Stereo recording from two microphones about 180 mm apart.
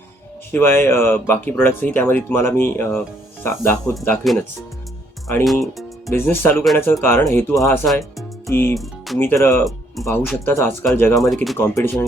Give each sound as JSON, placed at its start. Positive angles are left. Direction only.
{"t": 0.5, "sound": "speech", "side_deg": 15}
{"t": 4.2, "sound": "speech", "side_deg": 0}
{"t": 6.1, "sound": "speech", "side_deg": 10}
{"t": 8.4, "sound": "music", "side_deg": 10}
{"t": 8.7, "sound": "music", "side_deg": 0}
{"t": 9.1, "sound": "speech", "side_deg": 15}
{"t": 11.2, "sound": "speech", "side_deg": 0}
{"t": 11.5, "sound": "speech", "side_deg": 15}